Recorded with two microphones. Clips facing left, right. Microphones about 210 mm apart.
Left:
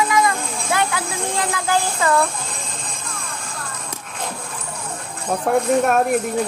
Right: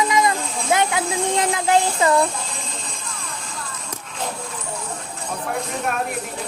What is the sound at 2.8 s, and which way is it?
Music, 50° left (ahead or behind).